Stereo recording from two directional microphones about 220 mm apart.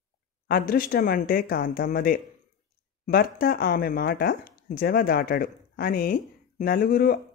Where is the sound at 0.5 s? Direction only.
40° left (ahead or behind).